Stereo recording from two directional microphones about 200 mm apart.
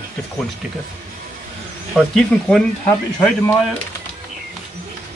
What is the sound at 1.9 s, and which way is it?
Speech, 5° left (ahead or behind).